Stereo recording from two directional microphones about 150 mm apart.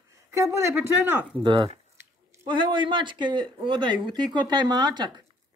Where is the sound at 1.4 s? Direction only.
35° right (ahead or behind).